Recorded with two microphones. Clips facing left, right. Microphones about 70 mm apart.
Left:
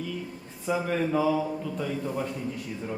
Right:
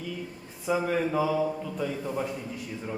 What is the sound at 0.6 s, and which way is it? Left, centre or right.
A man's voice, centre.